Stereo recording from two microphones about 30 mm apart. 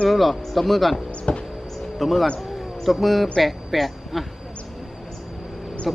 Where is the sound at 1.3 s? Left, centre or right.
Left.